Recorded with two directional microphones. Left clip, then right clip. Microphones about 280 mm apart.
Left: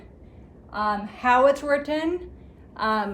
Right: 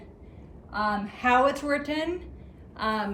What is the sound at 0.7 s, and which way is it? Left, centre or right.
A woman's voice, centre.